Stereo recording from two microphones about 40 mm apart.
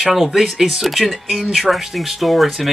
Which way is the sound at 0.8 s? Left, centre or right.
Centre.